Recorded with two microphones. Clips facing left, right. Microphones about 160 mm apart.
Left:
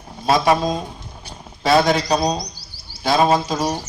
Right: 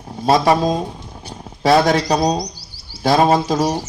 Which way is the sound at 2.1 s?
35° right (ahead or behind).